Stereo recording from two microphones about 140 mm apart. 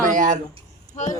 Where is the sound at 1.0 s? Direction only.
60° left (ahead or behind).